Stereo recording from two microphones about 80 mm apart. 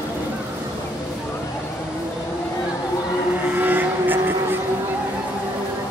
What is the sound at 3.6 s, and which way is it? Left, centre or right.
Vehicle, right.